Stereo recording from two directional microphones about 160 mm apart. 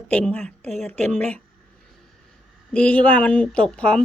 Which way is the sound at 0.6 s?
45° right (ahead or behind).